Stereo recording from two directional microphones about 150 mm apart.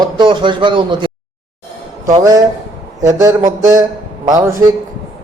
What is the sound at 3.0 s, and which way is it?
Speech, 20° right (ahead or behind).